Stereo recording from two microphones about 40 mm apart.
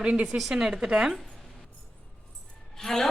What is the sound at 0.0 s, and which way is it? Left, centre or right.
Speech, right.